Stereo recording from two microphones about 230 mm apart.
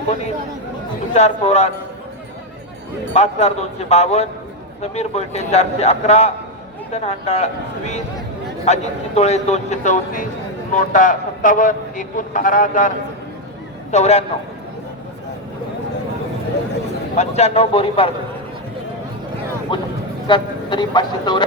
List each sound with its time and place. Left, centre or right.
1.1 s speech: left
3.2 s a man's voice: left
13.9 s speech: left
17.2 s speech: left
19.7 s speech: left